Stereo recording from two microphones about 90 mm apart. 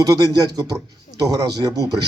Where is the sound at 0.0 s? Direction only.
40° right (ahead or behind).